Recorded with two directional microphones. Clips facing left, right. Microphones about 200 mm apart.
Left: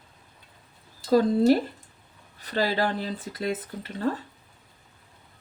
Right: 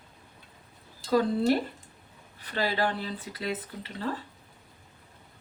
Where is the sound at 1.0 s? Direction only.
35° left (ahead or behind).